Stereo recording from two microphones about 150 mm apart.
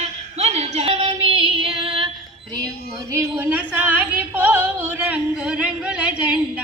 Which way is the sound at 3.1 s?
15° right (ahead or behind).